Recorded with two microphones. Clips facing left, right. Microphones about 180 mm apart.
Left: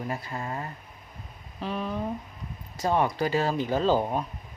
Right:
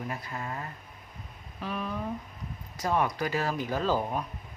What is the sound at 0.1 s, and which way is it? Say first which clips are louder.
Speech: left 3 dB; 30° left (ahead or behind).